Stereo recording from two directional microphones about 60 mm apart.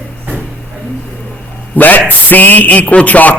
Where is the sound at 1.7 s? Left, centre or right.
Left.